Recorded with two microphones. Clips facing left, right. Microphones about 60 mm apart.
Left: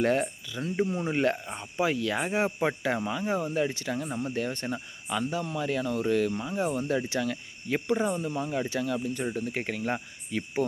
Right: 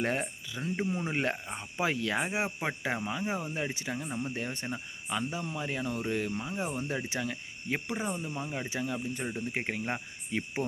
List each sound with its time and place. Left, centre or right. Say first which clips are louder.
0.0 s speech: left 6 dB; centre
4.1 s speech: left 3 dB; centre
4.4 s speech: left 5 dB; centre